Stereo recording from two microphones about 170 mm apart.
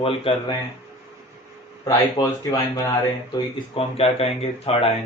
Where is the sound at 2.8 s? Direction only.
20° left (ahead or behind).